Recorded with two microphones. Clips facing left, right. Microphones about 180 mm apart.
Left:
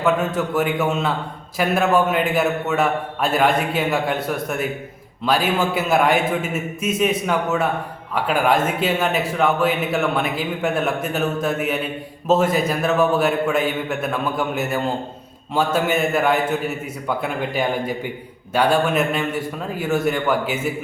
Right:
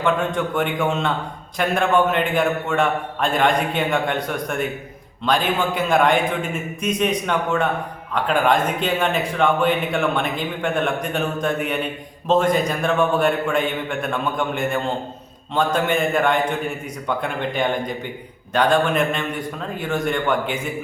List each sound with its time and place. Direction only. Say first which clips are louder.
0.0 s a man's voice: left 1 dB; 5° left (ahead or behind)